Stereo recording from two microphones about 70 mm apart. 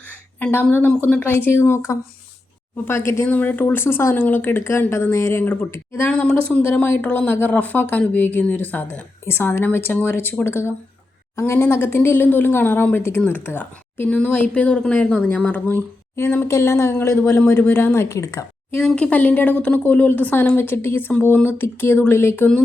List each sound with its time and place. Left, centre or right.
1.0 s speech: left
3.2 s speech: left
6.2 s speech: left
14.1 s speech: centre; by 18.4 s left
18.9 s speech: left